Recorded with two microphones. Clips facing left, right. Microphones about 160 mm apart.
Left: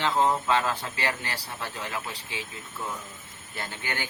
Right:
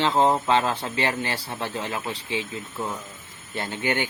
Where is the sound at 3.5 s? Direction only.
25° right (ahead or behind).